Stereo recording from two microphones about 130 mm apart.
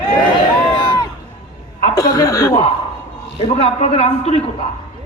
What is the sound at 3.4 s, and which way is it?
A man's voice, 50° left (ahead or behind).